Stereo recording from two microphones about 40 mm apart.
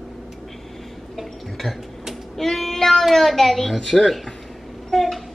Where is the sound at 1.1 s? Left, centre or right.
Centre.